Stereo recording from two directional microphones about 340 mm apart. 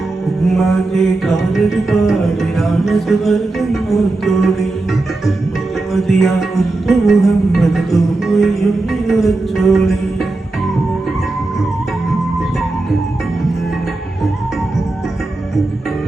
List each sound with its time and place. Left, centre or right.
0.4 s music: centre
5.9 s music: centre